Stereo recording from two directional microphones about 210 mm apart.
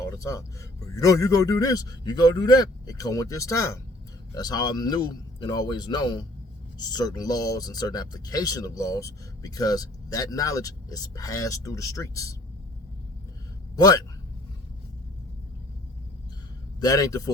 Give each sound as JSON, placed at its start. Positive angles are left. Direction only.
{"t": 0.2, "sound": "a man's voice", "side_deg": 15}
{"t": 13.7, "sound": "a man's voice", "side_deg": 20}
{"t": 16.8, "sound": "speech", "side_deg": 15}